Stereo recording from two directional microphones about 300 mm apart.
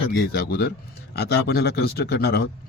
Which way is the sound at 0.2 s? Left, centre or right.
Left.